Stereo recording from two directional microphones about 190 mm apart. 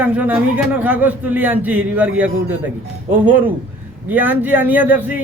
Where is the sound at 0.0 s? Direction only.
10° right (ahead or behind).